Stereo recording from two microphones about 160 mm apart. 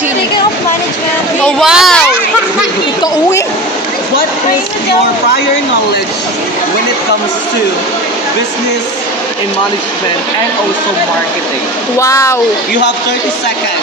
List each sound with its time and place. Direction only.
1.5 s a child's voice: centre (ahead or behind)
11.9 s speech: 20° left (ahead or behind)